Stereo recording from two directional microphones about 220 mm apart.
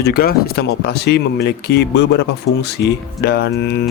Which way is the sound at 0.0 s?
45° left (ahead or behind).